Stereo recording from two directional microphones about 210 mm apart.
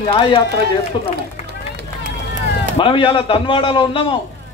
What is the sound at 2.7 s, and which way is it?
A man's voice, 25° left (ahead or behind).